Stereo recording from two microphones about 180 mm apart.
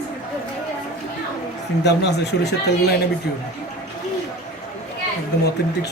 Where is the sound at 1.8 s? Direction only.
70° left (ahead or behind).